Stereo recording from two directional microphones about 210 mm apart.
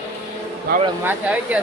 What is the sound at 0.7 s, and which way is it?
Speech, 50° right (ahead or behind).